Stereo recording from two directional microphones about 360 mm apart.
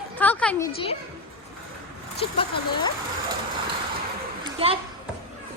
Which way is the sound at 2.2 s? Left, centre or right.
Centre.